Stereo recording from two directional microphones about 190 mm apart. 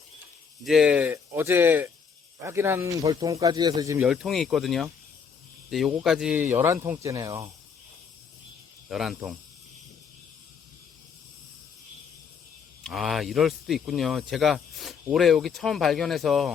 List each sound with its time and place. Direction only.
0.6 s speech: centre (ahead or behind); by 4.0 s 20° right (ahead or behind)
4.0 s speech: 5° right (ahead or behind)
8.9 s speech: centre (ahead or behind)
12.8 s speech: centre (ahead or behind)